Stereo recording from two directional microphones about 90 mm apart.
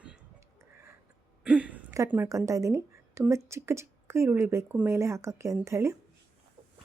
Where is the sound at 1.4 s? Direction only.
15° right (ahead or behind).